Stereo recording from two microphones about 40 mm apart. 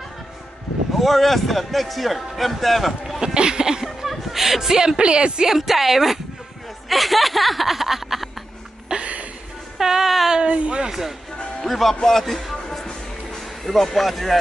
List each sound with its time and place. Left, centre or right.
0.9 s a man's voice: centre
3.2 s music: centre
3.8 s a sound: centre
5.0 s speech: right
5.5 s a woman's voice: centre
8.8 s a sound: right
9.8 s music: centre
10.3 s speech: right
10.9 s a woman's voice: centre
11.6 s a man's voice: centre
13.7 s a man's voice: centre